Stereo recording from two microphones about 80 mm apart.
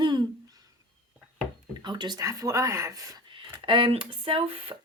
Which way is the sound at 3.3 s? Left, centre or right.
Right.